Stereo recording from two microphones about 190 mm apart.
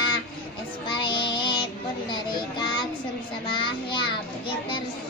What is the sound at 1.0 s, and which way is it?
Child singing, 25° left (ahead or behind).